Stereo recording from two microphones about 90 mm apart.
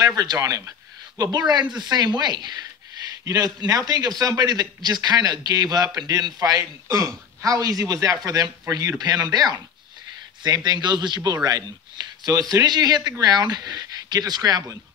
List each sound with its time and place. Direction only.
0.0 s a man's voice: 45° right (ahead or behind)